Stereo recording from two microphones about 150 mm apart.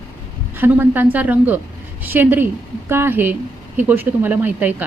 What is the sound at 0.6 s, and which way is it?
A woman's voice, 10° right (ahead or behind).